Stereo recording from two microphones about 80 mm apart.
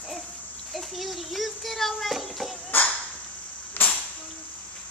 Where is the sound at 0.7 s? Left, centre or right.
Centre.